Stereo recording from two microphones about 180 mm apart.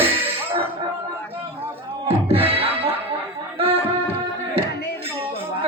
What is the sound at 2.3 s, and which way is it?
Music, 30° right (ahead or behind).